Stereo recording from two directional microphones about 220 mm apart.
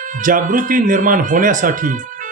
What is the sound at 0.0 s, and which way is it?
Speech, 35° right (ahead or behind).